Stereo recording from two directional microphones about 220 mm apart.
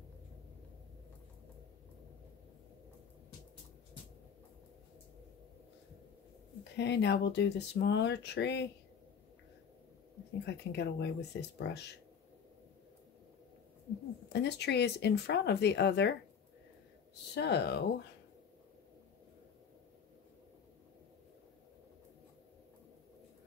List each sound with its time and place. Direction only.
6.8 s speech: 50° left (ahead or behind)
10.4 s speech: 50° left (ahead or behind)
14.3 s speech: 50° left (ahead or behind)
17.3 s speech: 50° left (ahead or behind)